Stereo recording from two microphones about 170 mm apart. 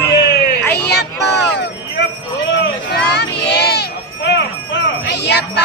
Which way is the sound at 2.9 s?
75° left (ahead or behind).